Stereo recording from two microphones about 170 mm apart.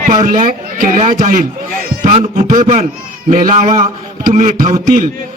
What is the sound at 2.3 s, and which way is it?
A man's voice, 50° right (ahead or behind).